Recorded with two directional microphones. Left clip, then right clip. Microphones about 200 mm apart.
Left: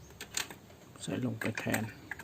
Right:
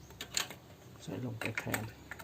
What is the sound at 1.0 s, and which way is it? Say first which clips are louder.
Speech: left 4 dB; 35° left (ahead or behind).